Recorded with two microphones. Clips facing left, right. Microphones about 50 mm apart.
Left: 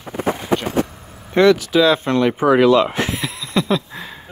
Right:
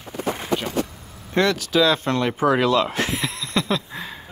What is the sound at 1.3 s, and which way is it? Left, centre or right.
Speech, centre.